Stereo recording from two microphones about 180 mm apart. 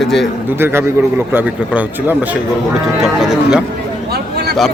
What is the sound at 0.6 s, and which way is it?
A man's voice, 10° right (ahead or behind).